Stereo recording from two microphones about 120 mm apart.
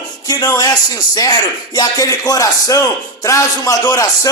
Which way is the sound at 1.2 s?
30° left (ahead or behind).